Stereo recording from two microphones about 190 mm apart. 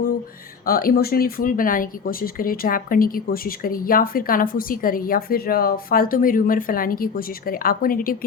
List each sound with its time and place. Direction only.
0.6 s speech: 50° left (ahead or behind)